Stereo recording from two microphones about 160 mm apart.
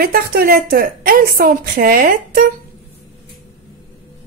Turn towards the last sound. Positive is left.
turn(degrees=-65)  # may be behind; listen again after turning